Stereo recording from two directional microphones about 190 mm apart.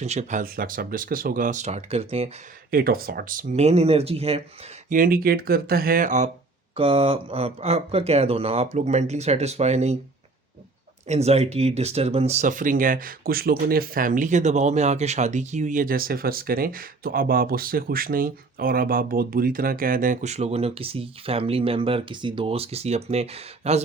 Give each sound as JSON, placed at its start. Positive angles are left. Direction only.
{"t": 0.0, "sound": "speech", "side_deg": -35}
{"t": 2.6, "sound": "speech", "side_deg": -50}
{"t": 3.5, "sound": "speech", "side_deg": -35}
{"t": 4.9, "sound": "speech", "side_deg": -50}
{"t": 6.7, "sound": "speech", "side_deg": -30}
{"t": 11.1, "sound": "speech", "side_deg": -35}